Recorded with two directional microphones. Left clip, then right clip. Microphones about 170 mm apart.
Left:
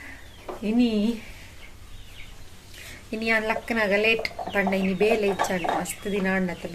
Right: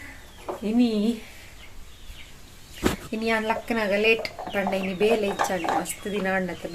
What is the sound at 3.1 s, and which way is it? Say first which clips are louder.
Speech: left 4 dB; 10° left (ahead or behind).